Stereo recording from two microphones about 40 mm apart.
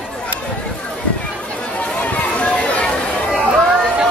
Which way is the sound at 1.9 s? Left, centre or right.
Left.